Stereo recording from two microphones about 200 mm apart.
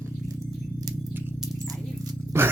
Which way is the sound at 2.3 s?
15° right (ahead or behind).